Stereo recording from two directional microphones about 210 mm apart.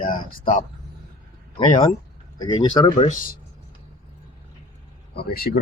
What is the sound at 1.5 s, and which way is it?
Speech, 25° left (ahead or behind).